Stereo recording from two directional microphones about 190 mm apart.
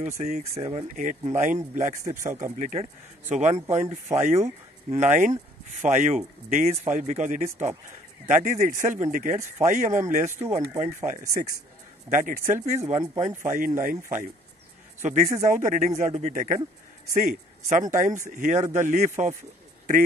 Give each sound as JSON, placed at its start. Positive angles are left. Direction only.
{"t": 0.0, "sound": "speech", "side_deg": -35}
{"t": 0.9, "sound": "speech", "side_deg": -40}
{"t": 15.0, "sound": "speech", "side_deg": -40}